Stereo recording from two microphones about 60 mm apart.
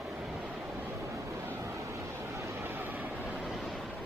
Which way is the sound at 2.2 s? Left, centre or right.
Right.